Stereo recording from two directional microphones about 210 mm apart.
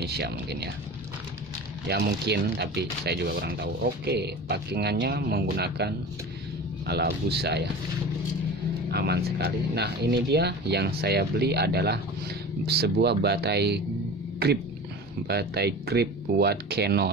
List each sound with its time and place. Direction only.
0.0 s speech: 50° right (ahead or behind)
1.9 s speech: 50° right (ahead or behind)
8.9 s speech: 50° right (ahead or behind)
15.2 s speech: 50° right (ahead or behind)